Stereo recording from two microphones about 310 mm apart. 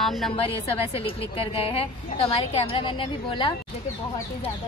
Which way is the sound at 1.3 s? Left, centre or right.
Centre.